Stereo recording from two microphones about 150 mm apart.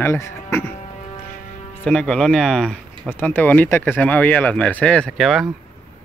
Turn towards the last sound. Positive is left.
turn(degrees=0)  # may be behind; listen again after turning